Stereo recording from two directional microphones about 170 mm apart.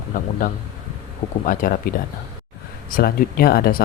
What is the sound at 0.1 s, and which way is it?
Speech, 50° left (ahead or behind).